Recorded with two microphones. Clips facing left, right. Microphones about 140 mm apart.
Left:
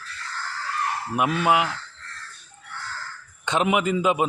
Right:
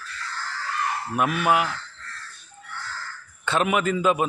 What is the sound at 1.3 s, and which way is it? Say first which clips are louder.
Speech: left 1 dB; 25° left (ahead or behind).